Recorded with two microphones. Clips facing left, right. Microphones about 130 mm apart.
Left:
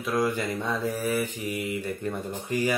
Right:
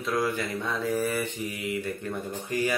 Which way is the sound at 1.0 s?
5° left (ahead or behind).